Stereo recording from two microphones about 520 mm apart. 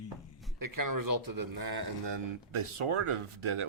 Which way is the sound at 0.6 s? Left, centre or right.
Right.